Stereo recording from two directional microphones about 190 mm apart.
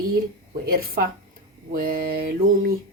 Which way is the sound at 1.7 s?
50° right (ahead or behind).